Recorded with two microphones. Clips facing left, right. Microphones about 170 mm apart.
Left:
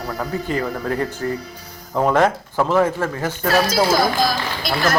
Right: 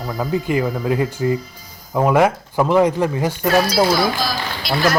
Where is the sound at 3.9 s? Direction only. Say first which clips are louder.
Left 1 dB; 50° left (ahead or behind).